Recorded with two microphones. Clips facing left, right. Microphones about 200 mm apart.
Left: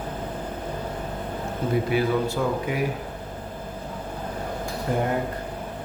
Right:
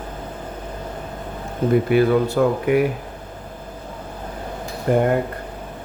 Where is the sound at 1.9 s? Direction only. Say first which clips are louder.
Right 7 dB; 60° right (ahead or behind).